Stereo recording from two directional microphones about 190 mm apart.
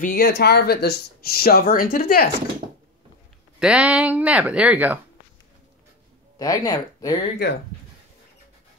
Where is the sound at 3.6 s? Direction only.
5° right (ahead or behind).